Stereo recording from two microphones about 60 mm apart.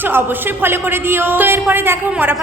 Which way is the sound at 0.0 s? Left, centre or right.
Right.